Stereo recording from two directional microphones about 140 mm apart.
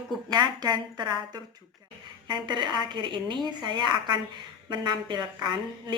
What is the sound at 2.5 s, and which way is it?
A woman's voice, 30° right (ahead or behind).